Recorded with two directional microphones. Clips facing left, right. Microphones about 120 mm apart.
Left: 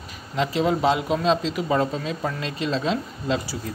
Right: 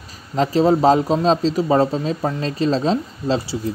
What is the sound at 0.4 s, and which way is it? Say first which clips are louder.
A man's voice: right 6 dB; 40° right (ahead or behind).